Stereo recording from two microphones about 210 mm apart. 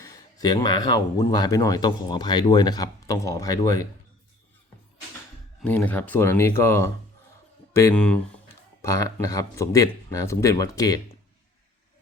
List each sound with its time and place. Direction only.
0.0 s speech: 15° left (ahead or behind)
5.6 s speech: 5° left (ahead or behind)